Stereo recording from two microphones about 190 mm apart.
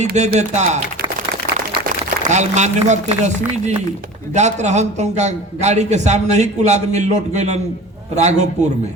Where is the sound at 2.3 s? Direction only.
40° right (ahead or behind).